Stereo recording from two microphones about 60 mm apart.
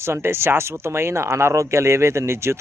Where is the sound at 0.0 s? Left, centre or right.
Right.